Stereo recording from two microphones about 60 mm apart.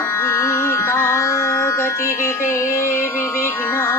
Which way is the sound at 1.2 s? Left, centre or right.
Left.